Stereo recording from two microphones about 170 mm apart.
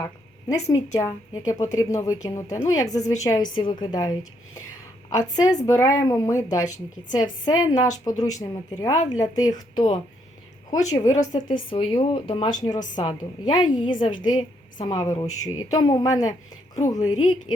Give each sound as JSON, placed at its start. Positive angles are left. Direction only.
{"t": 0.0, "sound": "a woman's voice", "side_deg": 20}